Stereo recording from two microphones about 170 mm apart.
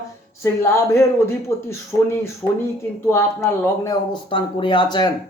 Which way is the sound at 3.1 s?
15° left (ahead or behind).